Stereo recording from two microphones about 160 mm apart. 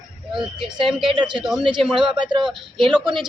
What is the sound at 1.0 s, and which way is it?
Speech, 30° right (ahead or behind).